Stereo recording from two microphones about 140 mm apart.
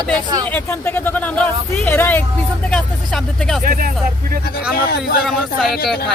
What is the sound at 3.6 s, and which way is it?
Speech, 90° right.